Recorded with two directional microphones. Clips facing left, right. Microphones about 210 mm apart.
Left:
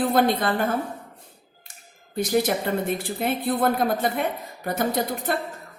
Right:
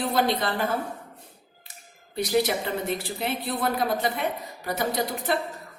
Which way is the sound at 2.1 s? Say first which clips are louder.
Left 2 dB; 50° left (ahead or behind).